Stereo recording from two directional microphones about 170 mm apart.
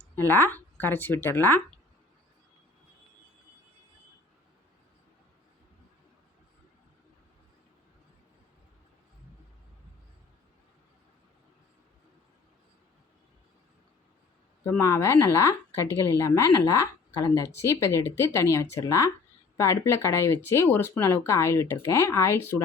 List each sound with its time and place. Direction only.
0.2 s speech: 10° left (ahead or behind)
14.6 s speech: 15° left (ahead or behind)